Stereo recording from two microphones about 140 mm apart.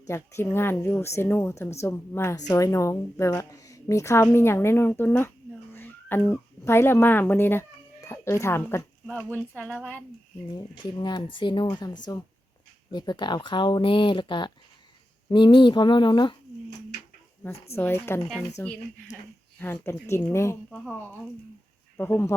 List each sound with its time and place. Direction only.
0.1 s a woman's voice: 20° left (ahead or behind)
10.5 s a woman's voice: 30° left (ahead or behind)
17.7 s a woman's voice: 20° left (ahead or behind)
21.9 s speech: 15° left (ahead or behind)